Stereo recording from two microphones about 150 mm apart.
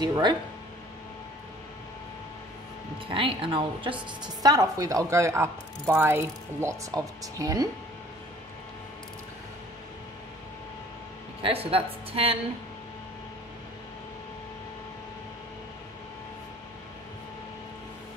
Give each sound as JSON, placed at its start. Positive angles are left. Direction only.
{"t": 0.0, "sound": "speech", "side_deg": -25}
{"t": 3.1, "sound": "a woman's voice", "side_deg": -35}
{"t": 4.2, "sound": "speech", "side_deg": -25}
{"t": 11.4, "sound": "a woman's voice", "side_deg": -40}